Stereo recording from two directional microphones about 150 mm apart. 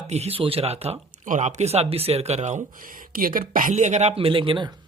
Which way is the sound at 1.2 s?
55° right (ahead or behind).